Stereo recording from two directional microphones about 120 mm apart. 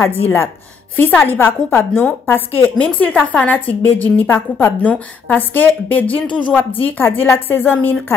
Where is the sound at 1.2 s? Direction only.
15° left (ahead or behind).